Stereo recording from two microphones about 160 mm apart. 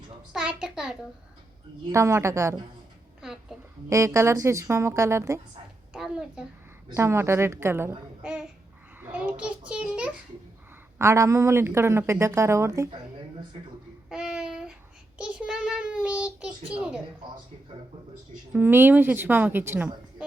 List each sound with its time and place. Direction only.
0.3 s a sound: 5° right (ahead or behind)
1.9 s a woman's voice: 15° right (ahead or behind)
3.5 s a woman's voice: centre (ahead or behind)
3.8 s a woman's voice: 20° right (ahead or behind)
5.9 s a child's voice: 5° right (ahead or behind)
6.9 s a woman's voice: 15° right (ahead or behind)
9.0 s babbling: 10° right (ahead or behind)
9.4 s a child's voice: 5° right (ahead or behind)
10.9 s a woman's voice: 20° right (ahead or behind)
14.1 s a sound: 5° right (ahead or behind)
15.2 s child singing: 5° right (ahead or behind)
18.5 s a woman's voice: 15° right (ahead or behind)